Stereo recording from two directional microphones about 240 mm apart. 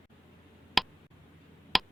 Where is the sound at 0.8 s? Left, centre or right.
Centre.